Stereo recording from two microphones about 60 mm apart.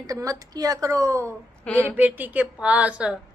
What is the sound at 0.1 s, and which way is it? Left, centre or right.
A woman's voice, right.